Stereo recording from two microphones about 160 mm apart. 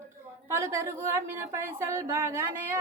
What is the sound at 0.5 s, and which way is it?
A woman's voice, 15° right (ahead or behind).